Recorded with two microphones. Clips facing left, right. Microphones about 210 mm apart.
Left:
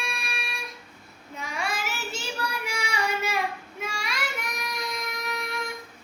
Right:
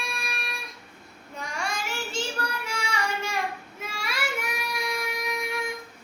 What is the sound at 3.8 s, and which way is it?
Child singing, 5° right (ahead or behind).